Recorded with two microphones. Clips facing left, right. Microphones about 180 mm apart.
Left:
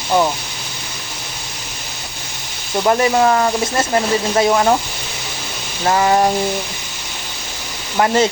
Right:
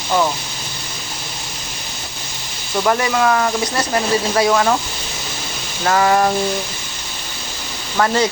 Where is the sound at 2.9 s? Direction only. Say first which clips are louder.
Left 3 dB; 25° left (ahead or behind).